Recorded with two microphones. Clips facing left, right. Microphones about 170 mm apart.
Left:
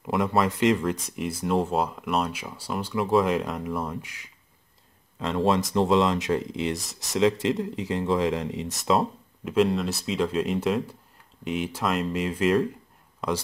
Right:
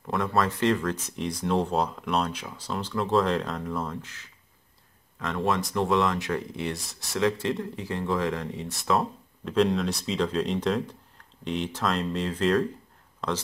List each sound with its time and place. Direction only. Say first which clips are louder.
0.0 s speech: left 2 dB; 15° left (ahead or behind)
5.2 s speech: left 4 dB; 25° left (ahead or behind)
9.5 s speech: left 1 dB; 5° left (ahead or behind)